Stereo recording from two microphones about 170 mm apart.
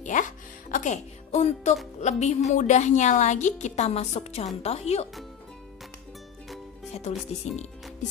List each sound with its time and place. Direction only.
0.0 s music: 50° left (ahead or behind)
2.0 s a woman's voice: 40° left (ahead or behind)
6.9 s speech: 40° left (ahead or behind)